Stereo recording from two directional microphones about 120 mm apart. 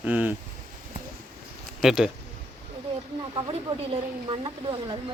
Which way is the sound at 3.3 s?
50° right (ahead or behind).